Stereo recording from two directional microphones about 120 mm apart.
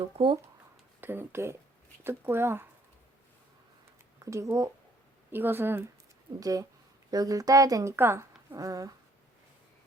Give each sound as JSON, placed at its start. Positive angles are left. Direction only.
{"t": 0.0, "sound": "speech", "side_deg": -45}
{"t": 1.0, "sound": "speech", "side_deg": -20}
{"t": 4.2, "sound": "speech", "side_deg": -25}
{"t": 6.4, "sound": "speech", "side_deg": -30}